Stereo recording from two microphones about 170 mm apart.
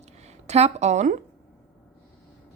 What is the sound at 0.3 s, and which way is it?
Speech, 40° right (ahead or behind).